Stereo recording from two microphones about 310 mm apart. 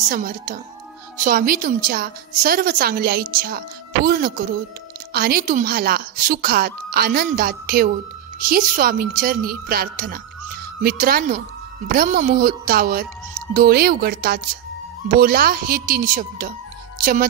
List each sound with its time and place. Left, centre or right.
0.1 s a woman's voice: right